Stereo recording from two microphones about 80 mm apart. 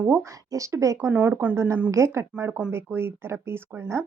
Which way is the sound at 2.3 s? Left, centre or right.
Centre.